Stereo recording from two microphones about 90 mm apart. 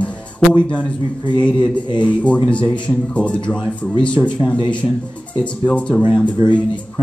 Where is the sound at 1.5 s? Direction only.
60° left (ahead or behind).